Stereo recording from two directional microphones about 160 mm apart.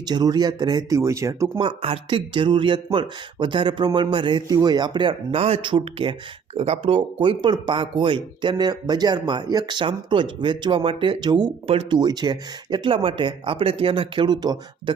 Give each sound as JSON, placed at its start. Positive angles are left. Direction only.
{"t": 0.0, "sound": "speech", "side_deg": -25}
{"t": 1.5, "sound": "speech", "side_deg": -35}